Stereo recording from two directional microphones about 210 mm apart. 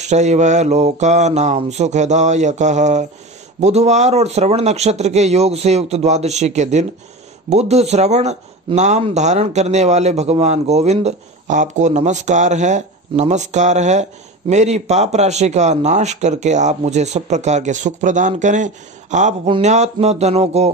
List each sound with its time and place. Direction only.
0.0 s speech: 35° right (ahead or behind)